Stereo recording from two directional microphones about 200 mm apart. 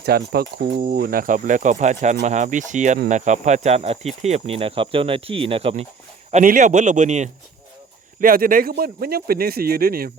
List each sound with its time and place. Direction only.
0.0 s speech: 50° right (ahead or behind); by 5.8 s 30° right (ahead or behind)
6.3 s speech: 40° right (ahead or behind)